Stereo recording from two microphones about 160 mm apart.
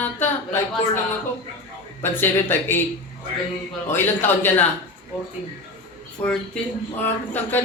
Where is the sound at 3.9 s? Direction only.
15° left (ahead or behind).